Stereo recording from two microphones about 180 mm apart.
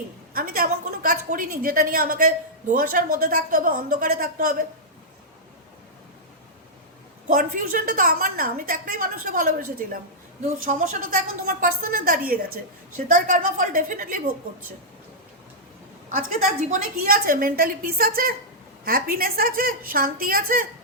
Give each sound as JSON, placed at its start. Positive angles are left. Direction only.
{"t": 0.3, "sound": "a woman's voice", "side_deg": -55}
{"t": 7.3, "sound": "a woman's voice", "side_deg": -50}
{"t": 16.1, "sound": "a woman's voice", "side_deg": -50}